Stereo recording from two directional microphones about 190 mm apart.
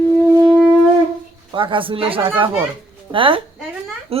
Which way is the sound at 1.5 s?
25° right (ahead or behind).